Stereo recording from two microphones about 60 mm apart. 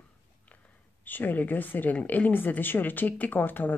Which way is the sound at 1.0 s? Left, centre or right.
Left.